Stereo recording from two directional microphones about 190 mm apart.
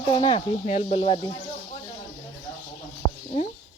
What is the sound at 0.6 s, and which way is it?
Speech, 35° left (ahead or behind).